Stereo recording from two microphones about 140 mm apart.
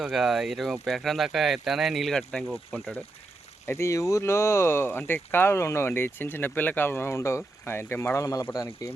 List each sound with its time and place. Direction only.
0.0 s speech: 5° right (ahead or behind)
3.7 s speech: 20° left (ahead or behind)